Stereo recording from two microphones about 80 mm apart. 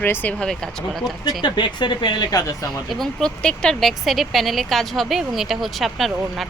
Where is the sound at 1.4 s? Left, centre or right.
Left.